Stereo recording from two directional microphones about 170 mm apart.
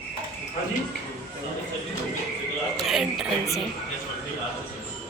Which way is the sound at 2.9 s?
Centre (ahead or behind).